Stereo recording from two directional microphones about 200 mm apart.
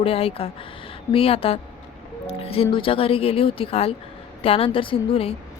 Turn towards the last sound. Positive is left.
turn(degrees=25)  # may be behind; listen again after turning